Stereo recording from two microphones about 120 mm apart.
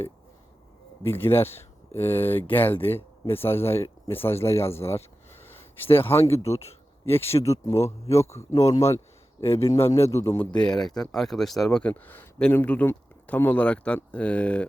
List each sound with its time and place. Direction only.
1.0 s a man's voice: 20° left (ahead or behind)
10.6 s speech: 5° left (ahead or behind)